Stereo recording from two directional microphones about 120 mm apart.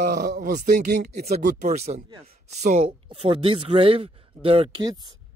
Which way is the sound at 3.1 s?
50° right (ahead or behind).